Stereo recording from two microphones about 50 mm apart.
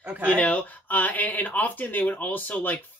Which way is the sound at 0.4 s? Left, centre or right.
Left.